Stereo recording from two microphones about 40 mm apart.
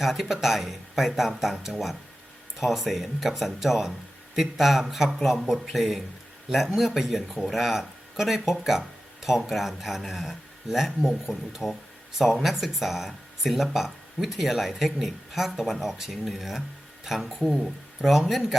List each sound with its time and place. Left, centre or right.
0.0 s speech: centre